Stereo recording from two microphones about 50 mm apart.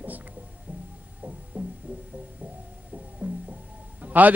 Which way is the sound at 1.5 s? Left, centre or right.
Right.